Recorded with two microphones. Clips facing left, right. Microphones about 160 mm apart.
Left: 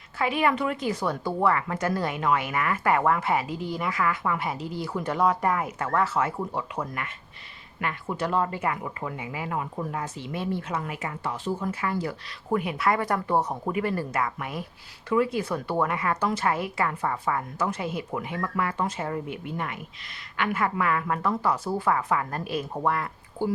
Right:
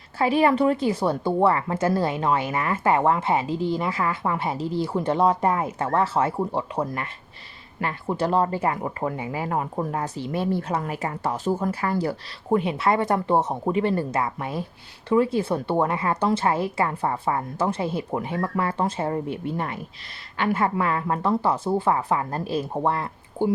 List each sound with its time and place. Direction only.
0.2 s a woman's voice: 35° right (ahead or behind)